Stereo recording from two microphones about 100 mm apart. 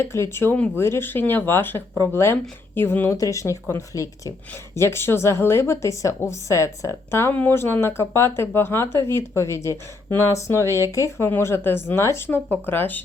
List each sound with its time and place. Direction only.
0.0 s speech: 25° left (ahead or behind)